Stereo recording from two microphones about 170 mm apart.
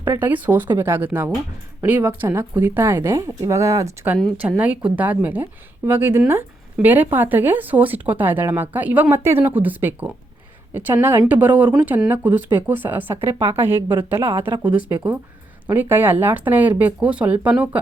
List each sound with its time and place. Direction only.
0.0 s a woman's voice: 15° right (ahead or behind)